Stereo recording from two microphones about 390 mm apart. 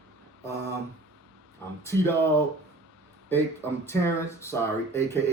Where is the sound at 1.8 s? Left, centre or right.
Centre.